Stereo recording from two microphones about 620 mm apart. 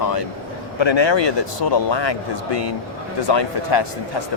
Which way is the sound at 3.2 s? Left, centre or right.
Left.